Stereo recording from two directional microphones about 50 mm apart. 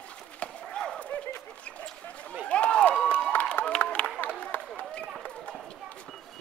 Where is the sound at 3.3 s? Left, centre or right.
Left.